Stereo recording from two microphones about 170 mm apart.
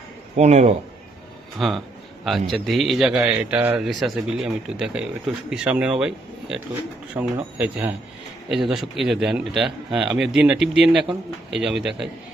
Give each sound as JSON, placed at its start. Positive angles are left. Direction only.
{"t": 0.3, "sound": "speech", "side_deg": -40}
{"t": 1.5, "sound": "speech", "side_deg": 0}